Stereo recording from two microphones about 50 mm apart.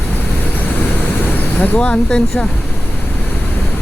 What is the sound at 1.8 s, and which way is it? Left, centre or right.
Speech, left.